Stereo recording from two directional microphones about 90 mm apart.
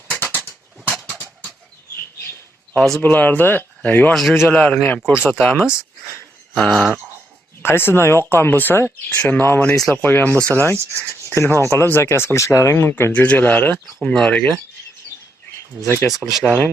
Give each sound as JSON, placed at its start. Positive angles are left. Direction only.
{"t": 0.1, "sound": "a sound", "side_deg": 20}
{"t": 1.0, "sound": "dog", "side_deg": 15}
{"t": 2.7, "sound": "a man's voice", "side_deg": 5}
{"t": 3.0, "sound": "speech", "side_deg": 20}
{"t": 4.1, "sound": "a man's voice", "side_deg": 0}
{"t": 4.5, "sound": "speech", "side_deg": 10}
{"t": 5.6, "sound": "speech", "side_deg": -10}
{"t": 6.1, "sound": "speech", "side_deg": 0}
{"t": 7.6, "sound": "speech", "side_deg": 25}
{"t": 14.0, "sound": "speech", "side_deg": 10}
{"t": 16.0, "sound": "a man's voice", "side_deg": 0}
{"t": 16.5, "sound": "speech", "side_deg": 10}